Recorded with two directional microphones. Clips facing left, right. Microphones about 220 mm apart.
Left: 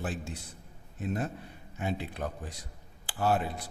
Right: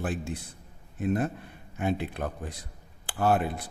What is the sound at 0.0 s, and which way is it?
A man's voice, 55° right (ahead or behind).